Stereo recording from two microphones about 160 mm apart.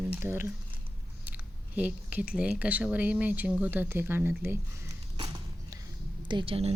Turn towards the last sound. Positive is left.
turn(degrees=-35)  # may be behind; listen again after turning